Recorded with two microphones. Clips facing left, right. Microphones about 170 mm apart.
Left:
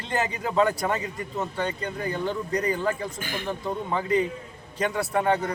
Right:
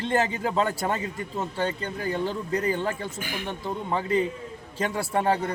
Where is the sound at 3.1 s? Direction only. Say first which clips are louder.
Left 1 dB; 10° right (ahead or behind).